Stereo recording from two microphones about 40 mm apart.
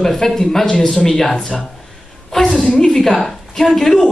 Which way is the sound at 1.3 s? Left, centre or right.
Left.